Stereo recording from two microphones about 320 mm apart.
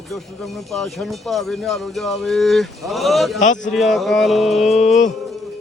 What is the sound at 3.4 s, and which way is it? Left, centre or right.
Speech, left.